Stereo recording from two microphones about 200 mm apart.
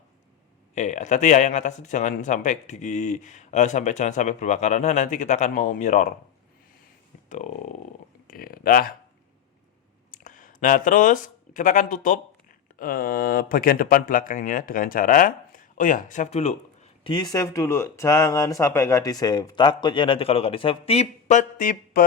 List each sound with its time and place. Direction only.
0.7 s speech: 35° left (ahead or behind)
7.3 s a sound: 40° left (ahead or behind)
10.1 s speech: 40° left (ahead or behind)
17.1 s speech: 20° left (ahead or behind); by 22.0 s 45° left (ahead or behind)